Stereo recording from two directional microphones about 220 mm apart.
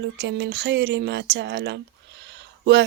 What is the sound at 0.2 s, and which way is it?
Speech, 50° right (ahead or behind).